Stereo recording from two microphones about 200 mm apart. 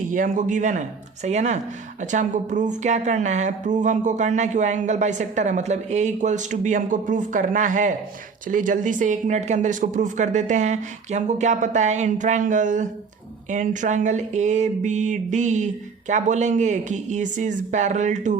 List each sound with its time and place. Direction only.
0.1 s speech: 40° right (ahead or behind)